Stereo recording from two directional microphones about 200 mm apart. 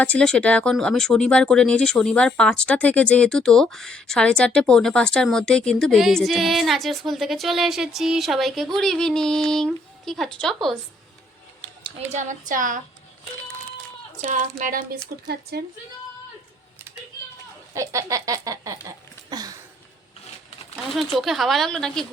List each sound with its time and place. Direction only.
0.0 s speech: 5° left (ahead or behind)
11.8 s speech: 35° right (ahead or behind)
14.2 s speech: 40° right (ahead or behind)
17.7 s a sound: 15° right (ahead or behind)
20.8 s speech: centre (ahead or behind)